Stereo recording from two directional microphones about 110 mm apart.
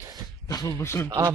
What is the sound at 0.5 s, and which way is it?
Speech, 30° left (ahead or behind).